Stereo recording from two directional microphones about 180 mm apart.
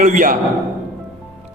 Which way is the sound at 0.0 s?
45° right (ahead or behind).